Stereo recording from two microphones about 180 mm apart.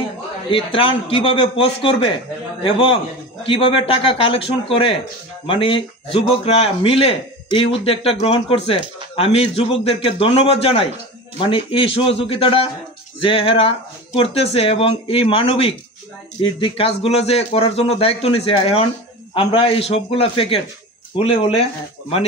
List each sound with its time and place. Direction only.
0.5 s speech: 30° left (ahead or behind)
3.4 s speech: 30° left (ahead or behind)